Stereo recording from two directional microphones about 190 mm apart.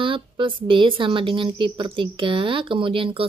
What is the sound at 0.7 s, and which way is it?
Speech, 25° right (ahead or behind).